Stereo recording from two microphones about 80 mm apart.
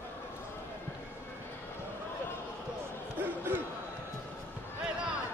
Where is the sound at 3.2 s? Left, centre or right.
Right.